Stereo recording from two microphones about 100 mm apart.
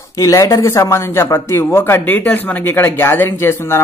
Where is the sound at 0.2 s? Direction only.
30° left (ahead or behind).